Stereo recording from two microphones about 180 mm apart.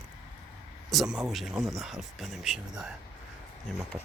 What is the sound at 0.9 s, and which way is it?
Speech, centre (ahead or behind).